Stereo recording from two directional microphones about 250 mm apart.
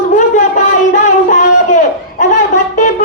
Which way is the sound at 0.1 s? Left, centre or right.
Left.